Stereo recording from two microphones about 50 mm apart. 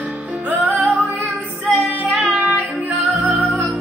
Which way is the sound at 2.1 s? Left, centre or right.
Centre.